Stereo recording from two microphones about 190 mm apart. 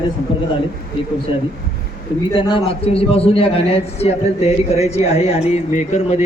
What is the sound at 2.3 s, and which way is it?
A man's voice, 25° left (ahead or behind).